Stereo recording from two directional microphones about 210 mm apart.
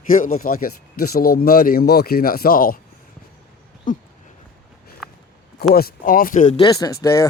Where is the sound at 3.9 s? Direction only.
40° left (ahead or behind).